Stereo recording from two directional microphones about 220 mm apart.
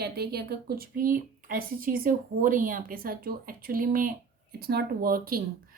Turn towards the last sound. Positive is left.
turn(degrees=-40)  # may be behind; listen again after turning